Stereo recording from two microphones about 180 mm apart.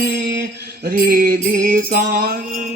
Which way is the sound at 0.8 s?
55° right (ahead or behind).